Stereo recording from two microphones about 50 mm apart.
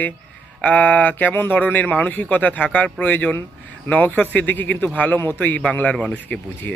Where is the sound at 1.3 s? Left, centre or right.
Left.